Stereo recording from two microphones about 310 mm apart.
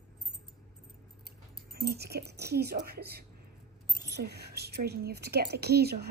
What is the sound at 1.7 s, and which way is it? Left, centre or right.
A woman's voice, right.